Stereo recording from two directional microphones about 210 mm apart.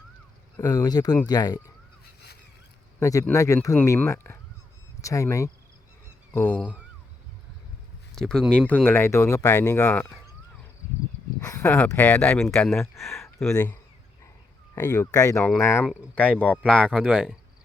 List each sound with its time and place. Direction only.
0.5 s speech: 20° left (ahead or behind)
3.0 s speech: 15° left (ahead or behind)
8.1 s speech: centre (ahead or behind)
11.3 s speech: 15° left (ahead or behind)
13.5 s speech: 15° left (ahead or behind)
14.8 s speech: 15° left (ahead or behind)